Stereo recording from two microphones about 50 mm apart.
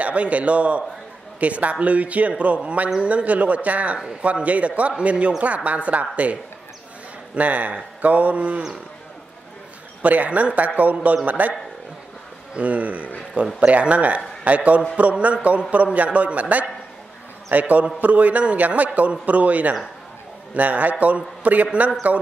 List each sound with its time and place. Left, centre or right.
0.0 s speech: right
7.3 s speech: right
10.0 s speech: right
12.5 s speech: right